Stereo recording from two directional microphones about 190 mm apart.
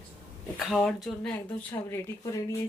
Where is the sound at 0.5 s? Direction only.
Centre (ahead or behind).